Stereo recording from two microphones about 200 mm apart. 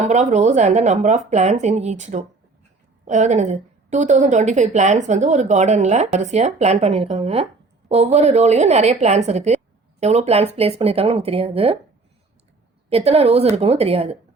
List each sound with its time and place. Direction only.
0.0 s a woman's voice: 35° right (ahead or behind)
12.9 s a woman's voice: 30° right (ahead or behind)